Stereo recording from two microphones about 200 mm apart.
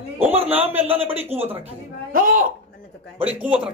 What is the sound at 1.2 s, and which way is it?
Speech, 30° right (ahead or behind).